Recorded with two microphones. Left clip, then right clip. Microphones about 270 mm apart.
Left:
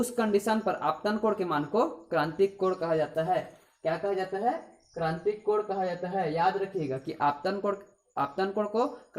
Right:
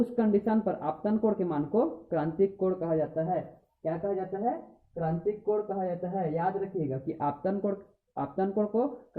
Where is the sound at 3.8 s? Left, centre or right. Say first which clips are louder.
Left 2 dB; centre.